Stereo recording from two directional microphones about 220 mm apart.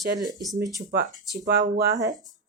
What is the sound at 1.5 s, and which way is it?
Speech, 45° right (ahead or behind).